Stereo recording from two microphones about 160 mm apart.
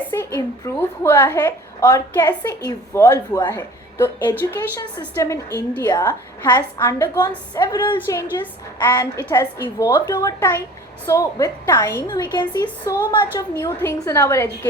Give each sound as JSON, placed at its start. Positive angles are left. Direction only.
{"t": 0.3, "sound": "a woman's voice", "side_deg": 15}
{"t": 12.6, "sound": "a woman's voice", "side_deg": 15}